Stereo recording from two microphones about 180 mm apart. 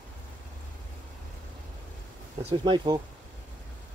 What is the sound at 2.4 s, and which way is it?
Speech, 30° right (ahead or behind).